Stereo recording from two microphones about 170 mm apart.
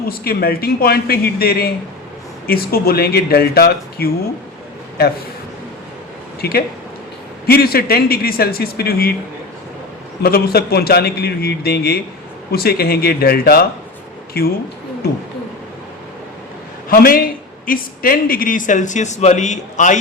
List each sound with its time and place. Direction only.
0.1 s speech: 65° left (ahead or behind)
6.4 s a man's voice: 65° left (ahead or behind)
10.2 s a man's voice: 65° left (ahead or behind)
16.9 s speech: 60° left (ahead or behind)